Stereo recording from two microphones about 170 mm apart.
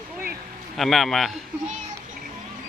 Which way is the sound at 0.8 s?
Centre (ahead or behind).